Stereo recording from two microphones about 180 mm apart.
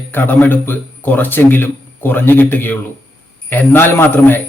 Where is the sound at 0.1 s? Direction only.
10° left (ahead or behind).